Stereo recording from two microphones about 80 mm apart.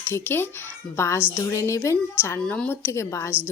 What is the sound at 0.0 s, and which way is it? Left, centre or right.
Speech, left.